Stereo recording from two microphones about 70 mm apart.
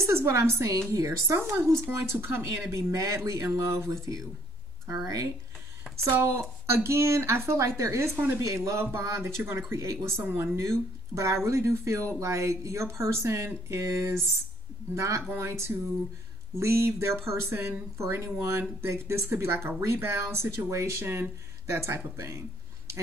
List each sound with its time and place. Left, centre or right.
0.0 s speech: right
2.7 s speech: right
4.9 s speech: right
6.1 s speech: right